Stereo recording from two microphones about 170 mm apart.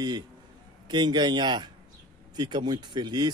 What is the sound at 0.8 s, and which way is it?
A man's voice, 25° right (ahead or behind).